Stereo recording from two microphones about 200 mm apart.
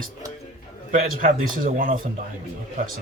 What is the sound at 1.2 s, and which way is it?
Speech, 40° right (ahead or behind).